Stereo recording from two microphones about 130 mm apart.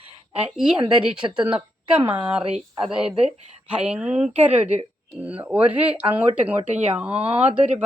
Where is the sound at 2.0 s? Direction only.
40° right (ahead or behind).